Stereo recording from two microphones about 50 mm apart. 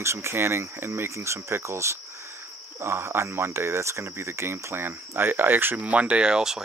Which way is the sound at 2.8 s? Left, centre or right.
Right.